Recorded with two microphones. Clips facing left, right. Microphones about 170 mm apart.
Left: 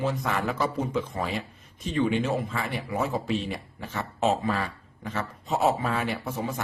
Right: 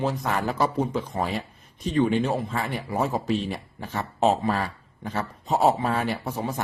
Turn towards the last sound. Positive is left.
turn(degrees=-35)  # may be behind; listen again after turning